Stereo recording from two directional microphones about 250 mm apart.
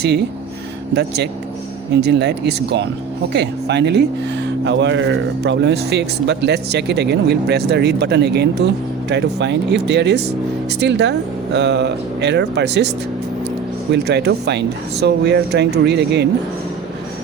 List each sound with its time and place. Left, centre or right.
0.9 s speech: right
13.9 s speech: right